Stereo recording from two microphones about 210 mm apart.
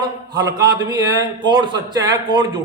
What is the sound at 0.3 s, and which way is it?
A man's voice, 20° right (ahead or behind).